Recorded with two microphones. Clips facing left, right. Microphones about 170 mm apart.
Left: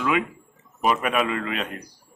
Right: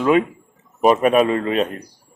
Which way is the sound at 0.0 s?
35° right (ahead or behind).